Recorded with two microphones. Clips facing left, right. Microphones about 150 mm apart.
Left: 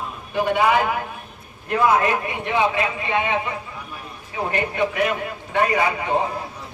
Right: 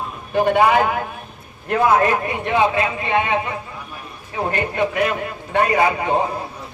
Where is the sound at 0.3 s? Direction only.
50° right (ahead or behind).